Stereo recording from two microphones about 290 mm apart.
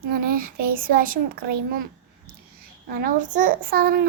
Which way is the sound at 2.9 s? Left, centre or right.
Right.